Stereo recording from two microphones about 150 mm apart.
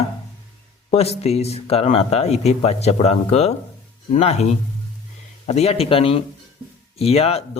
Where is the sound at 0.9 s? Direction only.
45° left (ahead or behind).